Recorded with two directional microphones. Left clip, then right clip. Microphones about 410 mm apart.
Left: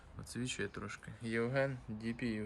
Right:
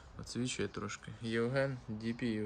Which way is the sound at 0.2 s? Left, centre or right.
Centre.